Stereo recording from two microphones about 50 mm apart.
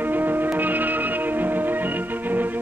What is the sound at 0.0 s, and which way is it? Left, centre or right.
Music, right.